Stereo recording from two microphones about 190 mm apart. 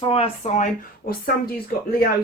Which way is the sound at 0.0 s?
30° left (ahead or behind).